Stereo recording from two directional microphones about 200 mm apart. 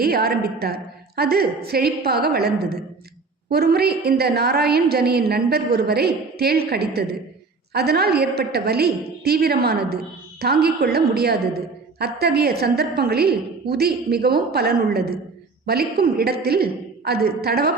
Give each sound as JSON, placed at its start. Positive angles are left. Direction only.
{"t": 0.0, "sound": "a woman's voice", "side_deg": -50}